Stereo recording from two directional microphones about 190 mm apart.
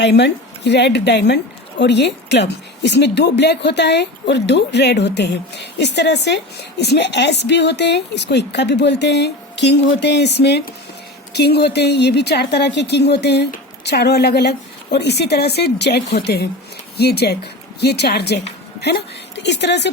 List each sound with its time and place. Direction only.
0.0 s a woman's voice: 65° left (ahead or behind)